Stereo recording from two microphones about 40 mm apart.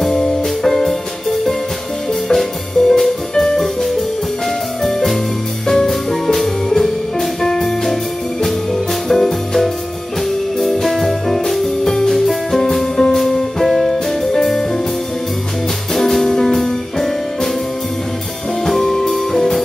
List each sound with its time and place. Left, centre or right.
0.0 s music: centre
2.2 s music: centre
4.8 s music: centre
15.9 s music: centre
18.7 s music: centre